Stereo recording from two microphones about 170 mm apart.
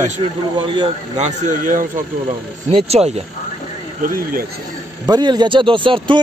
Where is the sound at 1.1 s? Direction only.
45° right (ahead or behind).